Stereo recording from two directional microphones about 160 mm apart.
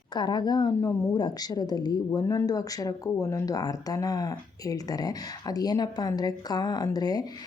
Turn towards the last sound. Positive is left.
turn(degrees=25)  # may be behind; listen again after turning